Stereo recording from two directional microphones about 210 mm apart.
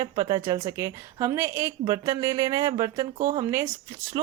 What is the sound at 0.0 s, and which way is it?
A woman's voice, 20° right (ahead or behind).